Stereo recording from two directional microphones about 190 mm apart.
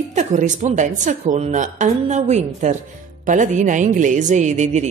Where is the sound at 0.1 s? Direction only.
40° right (ahead or behind).